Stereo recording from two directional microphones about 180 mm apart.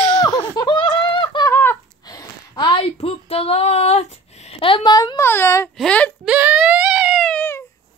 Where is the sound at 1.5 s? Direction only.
10° left (ahead or behind).